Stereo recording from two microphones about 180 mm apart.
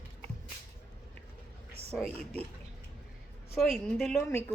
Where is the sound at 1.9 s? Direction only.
5° left (ahead or behind).